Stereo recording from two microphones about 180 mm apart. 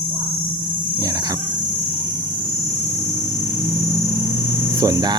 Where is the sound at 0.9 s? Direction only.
20° right (ahead or behind).